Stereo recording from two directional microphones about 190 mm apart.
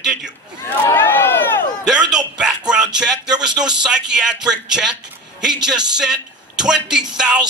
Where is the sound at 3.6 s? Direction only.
5° right (ahead or behind).